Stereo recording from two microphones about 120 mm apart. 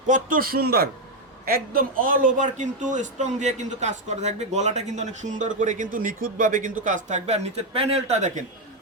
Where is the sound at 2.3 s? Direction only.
90° right.